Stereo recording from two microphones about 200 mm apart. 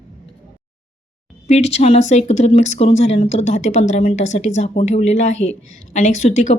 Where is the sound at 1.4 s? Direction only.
30° left (ahead or behind).